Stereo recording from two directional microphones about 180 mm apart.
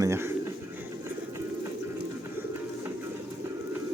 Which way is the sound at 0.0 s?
15° right (ahead or behind).